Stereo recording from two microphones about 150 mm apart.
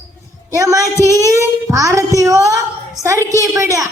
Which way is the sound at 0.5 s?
20° right (ahead or behind).